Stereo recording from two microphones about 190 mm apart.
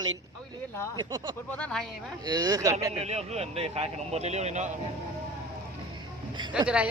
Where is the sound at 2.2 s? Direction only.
20° right (ahead or behind).